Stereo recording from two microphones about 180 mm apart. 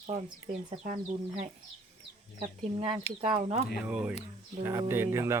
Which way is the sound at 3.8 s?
10° right (ahead or behind).